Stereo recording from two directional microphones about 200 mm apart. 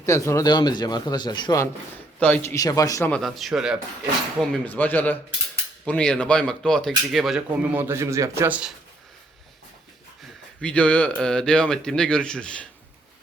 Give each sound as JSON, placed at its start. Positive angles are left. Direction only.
{"t": 0.0, "sound": "speech", "side_deg": 15}
{"t": 2.1, "sound": "speech", "side_deg": 10}
{"t": 4.4, "sound": "speech", "side_deg": 10}
{"t": 10.6, "sound": "speech", "side_deg": 5}